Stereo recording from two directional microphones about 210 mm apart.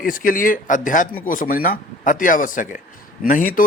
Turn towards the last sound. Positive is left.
turn(degrees=40)  # may be behind; listen again after turning